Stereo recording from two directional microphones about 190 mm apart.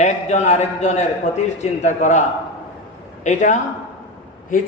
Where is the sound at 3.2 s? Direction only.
40° left (ahead or behind).